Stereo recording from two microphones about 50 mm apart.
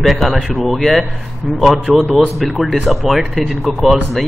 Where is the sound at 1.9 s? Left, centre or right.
Centre.